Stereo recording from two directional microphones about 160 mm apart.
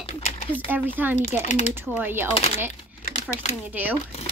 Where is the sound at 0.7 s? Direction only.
10° right (ahead or behind).